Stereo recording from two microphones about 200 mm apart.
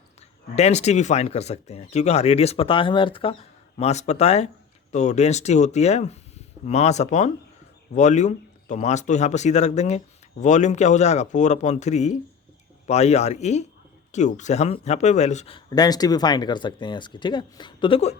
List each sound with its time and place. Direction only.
0.5 s speech: 35° left (ahead or behind)